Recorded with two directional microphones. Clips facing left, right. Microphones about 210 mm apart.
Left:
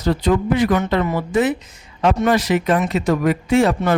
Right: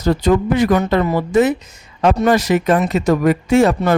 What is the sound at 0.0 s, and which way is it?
Speech, 45° right (ahead or behind).